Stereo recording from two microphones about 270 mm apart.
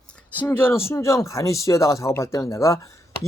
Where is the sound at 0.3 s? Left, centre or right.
Centre.